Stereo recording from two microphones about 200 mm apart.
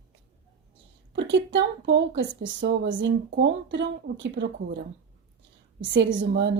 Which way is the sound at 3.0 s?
65° right (ahead or behind).